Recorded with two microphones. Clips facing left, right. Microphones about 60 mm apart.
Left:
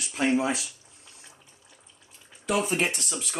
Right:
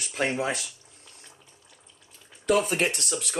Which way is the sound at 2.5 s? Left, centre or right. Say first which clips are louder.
Right 2 dB; right.